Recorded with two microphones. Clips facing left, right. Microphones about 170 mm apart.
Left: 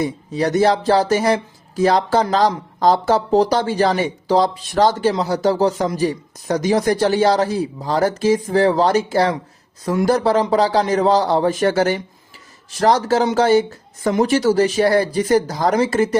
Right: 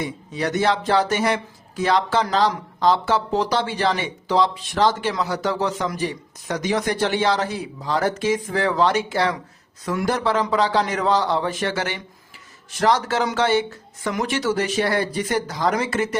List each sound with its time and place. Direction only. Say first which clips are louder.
0.0 s speech: left 6 dB; 35° left (ahead or behind)